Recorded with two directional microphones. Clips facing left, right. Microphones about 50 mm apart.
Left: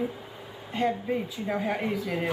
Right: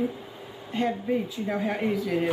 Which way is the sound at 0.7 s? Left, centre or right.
Centre.